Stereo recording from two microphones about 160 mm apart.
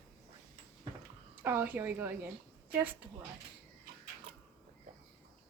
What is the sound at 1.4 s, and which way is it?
Speech, 15° right (ahead or behind).